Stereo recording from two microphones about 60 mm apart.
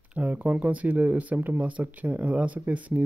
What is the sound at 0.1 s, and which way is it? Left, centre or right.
Speech, right.